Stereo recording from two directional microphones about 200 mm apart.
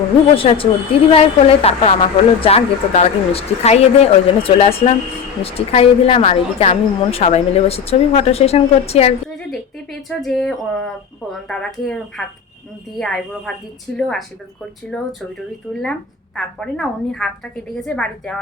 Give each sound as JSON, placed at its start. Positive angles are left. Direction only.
{"t": 0.3, "sound": "a woman's voice", "side_deg": 25}
{"t": 10.1, "sound": "a woman's voice", "side_deg": 0}